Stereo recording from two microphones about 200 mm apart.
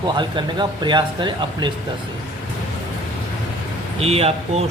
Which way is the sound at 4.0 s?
30° right (ahead or behind).